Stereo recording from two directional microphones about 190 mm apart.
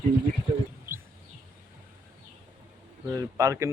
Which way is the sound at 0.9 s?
10° right (ahead or behind).